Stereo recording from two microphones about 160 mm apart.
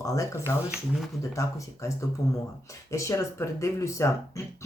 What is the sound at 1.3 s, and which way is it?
Speech, 20° left (ahead or behind).